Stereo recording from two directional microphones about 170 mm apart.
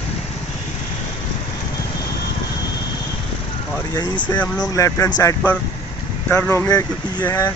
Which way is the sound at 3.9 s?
25° left (ahead or behind).